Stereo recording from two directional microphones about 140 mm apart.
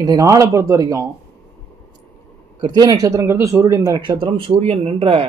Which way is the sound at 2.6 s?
30° right (ahead or behind).